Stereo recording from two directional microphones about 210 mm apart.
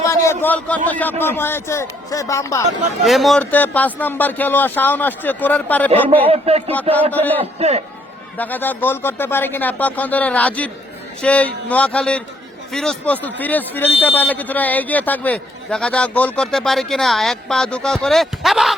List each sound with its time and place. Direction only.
0.0 s a sound: 15° left (ahead or behind)
0.9 s speech: 10° left (ahead or behind)
3.0 s speech: centre (ahead or behind)
6.2 s speech: 30° right (ahead or behind)
7.1 s speech: 10° left (ahead or behind)
7.3 s a man's voice: 30° right (ahead or behind)
8.4 s speech: 10° left (ahead or behind)